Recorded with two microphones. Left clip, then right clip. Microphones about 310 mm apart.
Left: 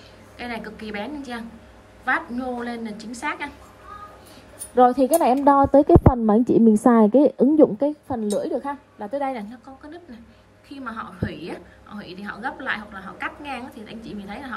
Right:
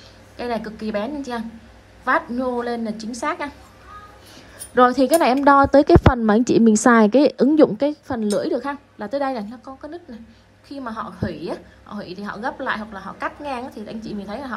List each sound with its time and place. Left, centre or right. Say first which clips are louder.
0.4 s a woman's voice: right 6 dB; centre
2.7 s a woman's voice: right 6 dB; centre
3.0 s a woman's voice: right 4 dB; centre
4.7 s a woman's voice: right 1 dB; left
10.7 s a woman's voice: right 3 dB; centre